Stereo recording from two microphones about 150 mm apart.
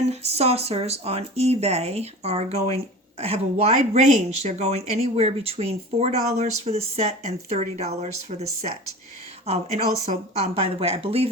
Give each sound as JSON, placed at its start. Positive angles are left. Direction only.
{"t": 0.0, "sound": "speech", "side_deg": -45}
{"t": 9.5, "sound": "a woman's voice", "side_deg": -50}